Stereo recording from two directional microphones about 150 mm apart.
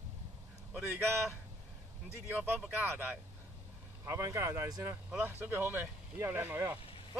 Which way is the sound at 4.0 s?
20° right (ahead or behind).